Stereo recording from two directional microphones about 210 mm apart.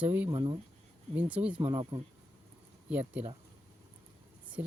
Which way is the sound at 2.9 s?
5° right (ahead or behind).